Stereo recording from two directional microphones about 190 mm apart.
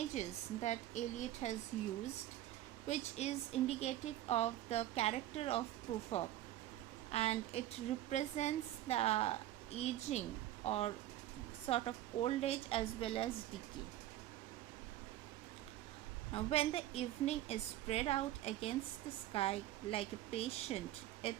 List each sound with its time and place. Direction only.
0.1 s speech: 35° left (ahead or behind)
2.8 s a woman's voice: 35° left (ahead or behind)
16.3 s speech: 30° left (ahead or behind)